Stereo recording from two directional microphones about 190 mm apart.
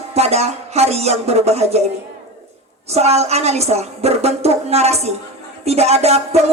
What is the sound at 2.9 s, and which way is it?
A woman's voice, 35° right (ahead or behind).